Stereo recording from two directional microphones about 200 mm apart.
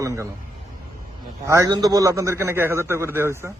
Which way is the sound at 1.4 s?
15° right (ahead or behind).